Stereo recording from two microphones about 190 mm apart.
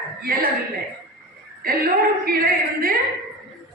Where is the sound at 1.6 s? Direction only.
50° right (ahead or behind).